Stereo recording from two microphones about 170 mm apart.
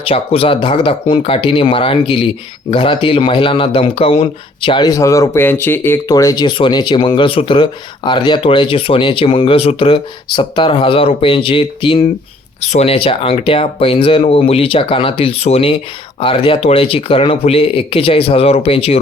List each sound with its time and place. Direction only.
0.0 s speech: 35° left (ahead or behind)